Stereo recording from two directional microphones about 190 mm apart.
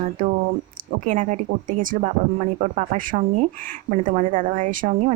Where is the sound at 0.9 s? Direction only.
45° right (ahead or behind).